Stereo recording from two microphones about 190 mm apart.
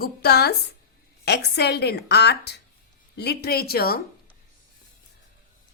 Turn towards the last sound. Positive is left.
turn(degrees=55)  # may be behind; listen again after turning